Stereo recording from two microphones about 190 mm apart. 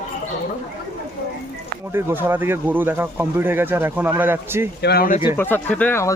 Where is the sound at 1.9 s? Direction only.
15° right (ahead or behind).